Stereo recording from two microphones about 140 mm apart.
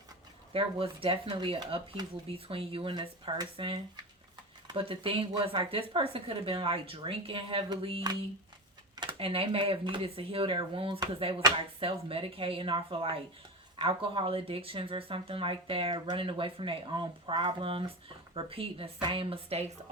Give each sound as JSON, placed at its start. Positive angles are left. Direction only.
{"t": 0.5, "sound": "speech", "side_deg": -40}